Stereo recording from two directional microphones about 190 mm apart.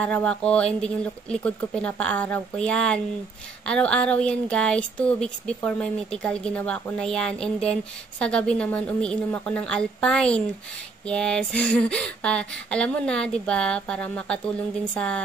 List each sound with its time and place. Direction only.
0.0 s speech: 5° left (ahead or behind)